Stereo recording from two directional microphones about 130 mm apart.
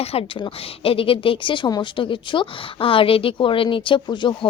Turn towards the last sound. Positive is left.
turn(degrees=35)  # may be behind; listen again after turning